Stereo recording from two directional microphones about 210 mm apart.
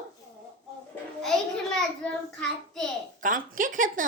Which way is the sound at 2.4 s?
Centre (ahead or behind).